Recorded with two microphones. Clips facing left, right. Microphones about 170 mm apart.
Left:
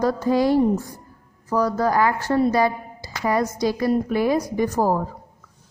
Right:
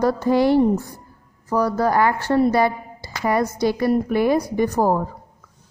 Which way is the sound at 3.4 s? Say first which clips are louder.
Right 2 dB; 60° right (ahead or behind).